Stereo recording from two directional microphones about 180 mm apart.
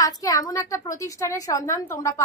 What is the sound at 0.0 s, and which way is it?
A woman's voice, 20° left (ahead or behind).